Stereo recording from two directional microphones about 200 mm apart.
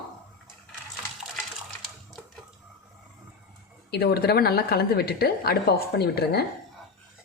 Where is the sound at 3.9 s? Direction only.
50° left (ahead or behind).